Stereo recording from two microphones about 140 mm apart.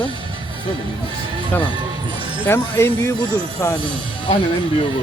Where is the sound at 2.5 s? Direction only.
20° left (ahead or behind).